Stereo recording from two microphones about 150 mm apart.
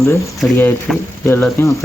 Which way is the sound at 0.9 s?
5° left (ahead or behind).